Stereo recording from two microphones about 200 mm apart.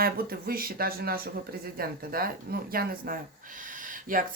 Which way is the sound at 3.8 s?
40° right (ahead or behind).